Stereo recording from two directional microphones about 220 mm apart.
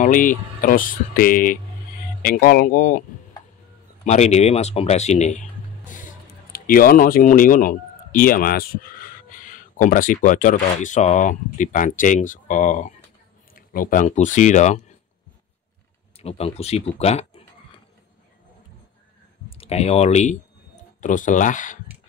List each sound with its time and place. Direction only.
0.0 s speech: 35° left (ahead or behind)
4.0 s speech: 30° left (ahead or behind)
16.2 s speech: 25° left (ahead or behind)
19.5 s speech: 25° left (ahead or behind)